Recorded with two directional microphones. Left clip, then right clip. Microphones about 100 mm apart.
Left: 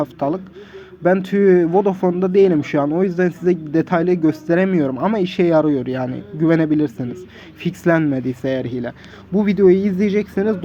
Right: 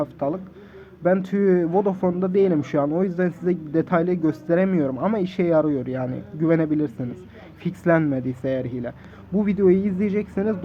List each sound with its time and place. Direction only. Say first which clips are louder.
0.0 s a man's voice: left 4 dB; 20° left (ahead or behind)